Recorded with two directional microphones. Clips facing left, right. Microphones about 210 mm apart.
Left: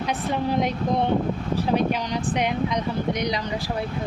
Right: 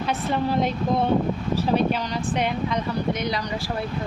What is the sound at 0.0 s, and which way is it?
Speech, 15° left (ahead or behind).